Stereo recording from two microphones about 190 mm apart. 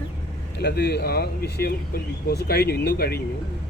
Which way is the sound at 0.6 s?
60° left (ahead or behind).